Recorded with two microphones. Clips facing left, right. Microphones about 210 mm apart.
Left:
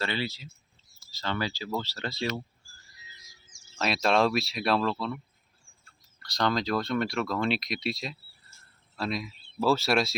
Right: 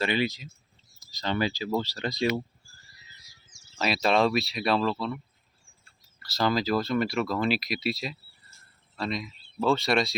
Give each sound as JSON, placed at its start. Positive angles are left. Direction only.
{"t": 0.0, "sound": "speech", "side_deg": -15}
{"t": 3.8, "sound": "speech", "side_deg": 0}
{"t": 6.2, "sound": "speech", "side_deg": -5}